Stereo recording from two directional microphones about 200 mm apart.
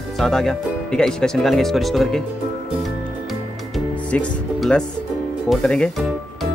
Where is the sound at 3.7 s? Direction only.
Centre (ahead or behind).